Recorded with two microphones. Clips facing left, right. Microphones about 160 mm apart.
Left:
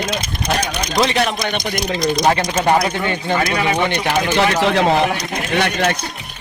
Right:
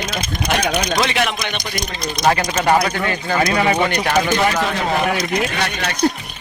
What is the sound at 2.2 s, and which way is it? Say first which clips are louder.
Speech: right 3 dB; 20° left (ahead or behind).